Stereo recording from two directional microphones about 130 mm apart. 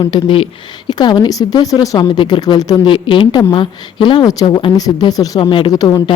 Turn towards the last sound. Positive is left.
turn(degrees=30)  # may be behind; listen again after turning